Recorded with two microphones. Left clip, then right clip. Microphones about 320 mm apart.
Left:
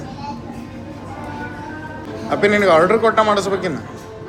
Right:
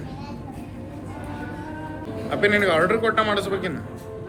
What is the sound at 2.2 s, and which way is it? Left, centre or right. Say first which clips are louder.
Speech: left 6 dB; centre.